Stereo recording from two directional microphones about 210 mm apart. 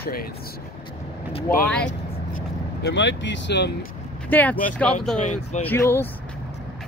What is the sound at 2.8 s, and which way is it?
Speech, 60° left (ahead or behind).